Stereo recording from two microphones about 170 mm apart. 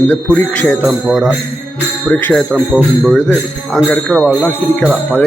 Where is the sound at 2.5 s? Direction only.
5° right (ahead or behind).